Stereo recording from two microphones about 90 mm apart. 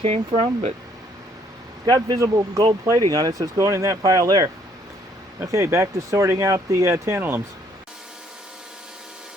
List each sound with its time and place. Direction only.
0.0 s speech: 80° right
1.9 s speech: 40° right (ahead or behind); by 7.4 s 25° right (ahead or behind)